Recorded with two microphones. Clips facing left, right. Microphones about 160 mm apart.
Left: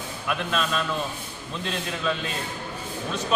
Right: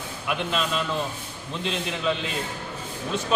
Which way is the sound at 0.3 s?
20° right (ahead or behind).